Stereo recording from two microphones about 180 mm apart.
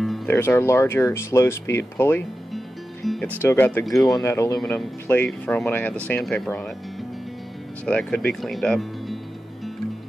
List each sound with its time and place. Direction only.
0.3 s speech: 15° left (ahead or behind)
3.8 s speech: centre (ahead or behind)
4.2 s speech: 15° left (ahead or behind)
7.8 s speech: 5° left (ahead or behind)